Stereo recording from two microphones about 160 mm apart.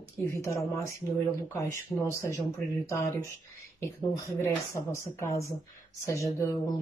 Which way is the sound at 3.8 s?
15° left (ahead or behind).